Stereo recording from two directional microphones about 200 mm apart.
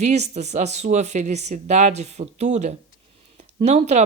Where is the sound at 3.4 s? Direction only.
35° right (ahead or behind).